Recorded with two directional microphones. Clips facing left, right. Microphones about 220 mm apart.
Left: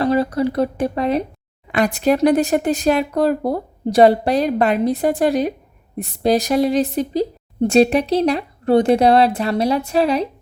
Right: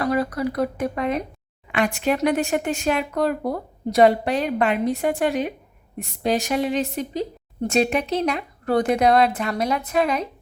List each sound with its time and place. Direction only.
0.0 s speech: 30° left (ahead or behind)